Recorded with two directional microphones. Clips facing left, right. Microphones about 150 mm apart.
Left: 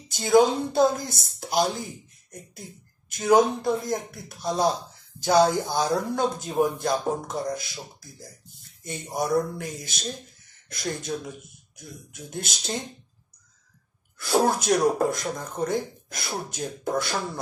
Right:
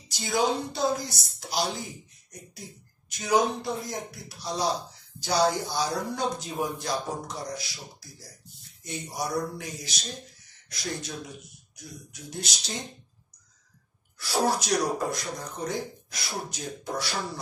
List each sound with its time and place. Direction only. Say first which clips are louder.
0.1 s speech: left 7 dB; 50° left (ahead or behind)
14.1 s speech: left 4 dB; 50° left (ahead or behind)